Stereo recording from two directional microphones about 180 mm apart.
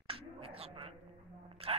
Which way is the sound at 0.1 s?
30° right (ahead or behind).